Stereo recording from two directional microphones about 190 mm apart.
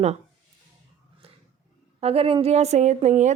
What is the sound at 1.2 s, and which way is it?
Roaring cats, 30° right (ahead or behind).